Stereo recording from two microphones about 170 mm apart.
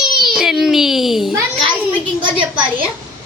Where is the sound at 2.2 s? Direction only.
30° right (ahead or behind).